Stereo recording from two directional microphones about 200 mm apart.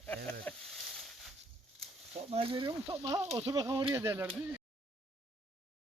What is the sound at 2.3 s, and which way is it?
Speech, 30° right (ahead or behind).